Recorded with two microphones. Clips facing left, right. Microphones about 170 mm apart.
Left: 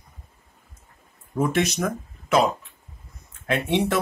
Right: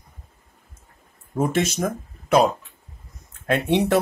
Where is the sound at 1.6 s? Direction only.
25° right (ahead or behind).